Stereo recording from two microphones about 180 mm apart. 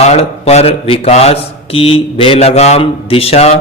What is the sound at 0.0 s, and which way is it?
Speech, 35° left (ahead or behind).